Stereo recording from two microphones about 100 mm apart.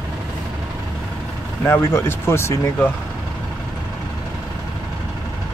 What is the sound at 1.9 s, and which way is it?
Speech, 25° left (ahead or behind).